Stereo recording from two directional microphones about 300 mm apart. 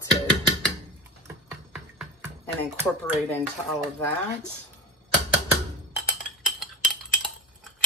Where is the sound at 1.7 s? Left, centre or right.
Centre.